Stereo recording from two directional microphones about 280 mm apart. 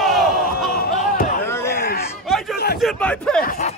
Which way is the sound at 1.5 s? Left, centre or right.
Centre.